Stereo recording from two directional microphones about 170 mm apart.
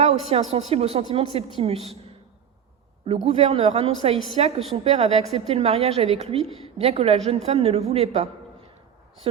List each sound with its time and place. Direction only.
0.0 s a woman's voice: 35° right (ahead or behind)
3.1 s a woman's voice: 35° right (ahead or behind)